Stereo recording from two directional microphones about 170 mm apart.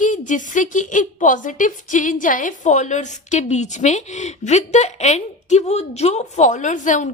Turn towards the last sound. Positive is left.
turn(degrees=50)  # may be behind; listen again after turning